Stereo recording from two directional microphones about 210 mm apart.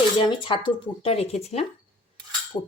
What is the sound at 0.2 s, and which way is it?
Speech, 25° left (ahead or behind).